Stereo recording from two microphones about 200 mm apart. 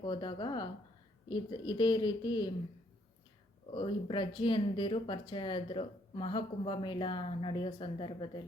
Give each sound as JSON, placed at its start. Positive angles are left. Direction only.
{"t": 0.0, "sound": "speech", "side_deg": 20}
{"t": 3.8, "sound": "speech", "side_deg": 25}